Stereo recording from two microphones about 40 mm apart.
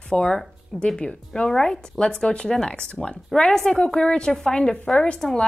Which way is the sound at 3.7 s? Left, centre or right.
Centre.